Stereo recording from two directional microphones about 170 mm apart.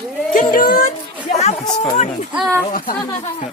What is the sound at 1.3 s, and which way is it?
Speech, 40° left (ahead or behind).